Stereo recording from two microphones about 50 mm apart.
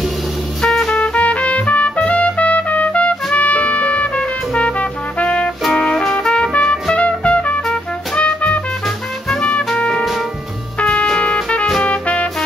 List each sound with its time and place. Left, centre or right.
0.6 s music: centre
0.9 s trumpet: left
5.6 s trumpet: centre
5.9 s trumpet: centre
7.6 s music: centre
10.8 s music: left
11.1 s music: centre
11.8 s music: left